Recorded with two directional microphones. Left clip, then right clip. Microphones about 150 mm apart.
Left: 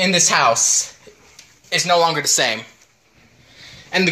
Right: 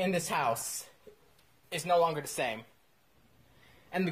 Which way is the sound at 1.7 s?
15° right (ahead or behind).